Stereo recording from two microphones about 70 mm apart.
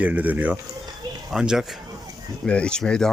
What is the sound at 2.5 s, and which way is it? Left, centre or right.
Speech, centre.